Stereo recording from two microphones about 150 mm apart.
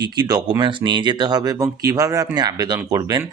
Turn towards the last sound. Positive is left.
turn(degrees=-25)  # may be behind; listen again after turning